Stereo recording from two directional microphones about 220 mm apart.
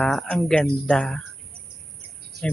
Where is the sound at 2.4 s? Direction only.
50° right (ahead or behind).